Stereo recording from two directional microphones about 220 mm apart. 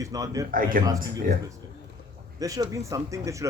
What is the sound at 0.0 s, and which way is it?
Speech, 15° right (ahead or behind).